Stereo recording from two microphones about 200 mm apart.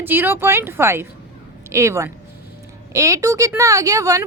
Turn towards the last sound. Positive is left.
turn(degrees=-15)  # may be behind; listen again after turning